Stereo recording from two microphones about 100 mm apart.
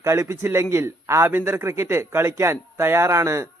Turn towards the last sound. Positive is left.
turn(degrees=-30)  # may be behind; listen again after turning